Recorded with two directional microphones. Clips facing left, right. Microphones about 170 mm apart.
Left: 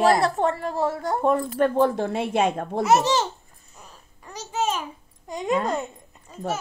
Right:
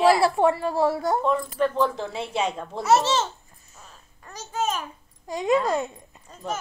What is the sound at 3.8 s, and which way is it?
Babbling, 10° left (ahead or behind).